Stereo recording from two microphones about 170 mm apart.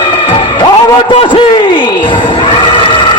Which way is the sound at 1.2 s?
25° left (ahead or behind).